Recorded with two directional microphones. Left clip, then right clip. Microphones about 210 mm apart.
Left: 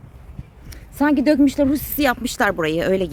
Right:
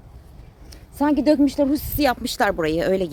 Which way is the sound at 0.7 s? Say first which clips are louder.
Left 2 dB; 20° left (ahead or behind).